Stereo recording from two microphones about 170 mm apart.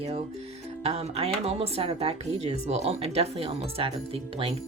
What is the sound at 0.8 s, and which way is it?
Speech, 35° right (ahead or behind).